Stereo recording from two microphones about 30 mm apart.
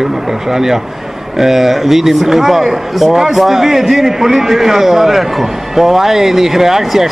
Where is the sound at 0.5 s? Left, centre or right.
Centre.